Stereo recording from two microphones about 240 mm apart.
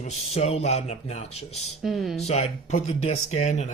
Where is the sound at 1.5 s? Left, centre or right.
Centre.